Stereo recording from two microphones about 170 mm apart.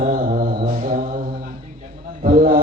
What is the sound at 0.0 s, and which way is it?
Mantra, 50° right (ahead or behind).